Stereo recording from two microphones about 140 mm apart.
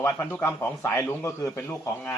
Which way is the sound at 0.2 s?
10° left (ahead or behind).